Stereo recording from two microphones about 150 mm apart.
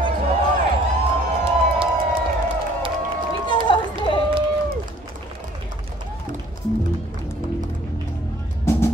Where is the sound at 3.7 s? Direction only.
35° left (ahead or behind).